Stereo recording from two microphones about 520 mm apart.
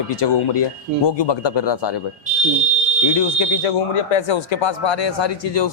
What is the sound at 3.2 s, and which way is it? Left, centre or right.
Speech, left.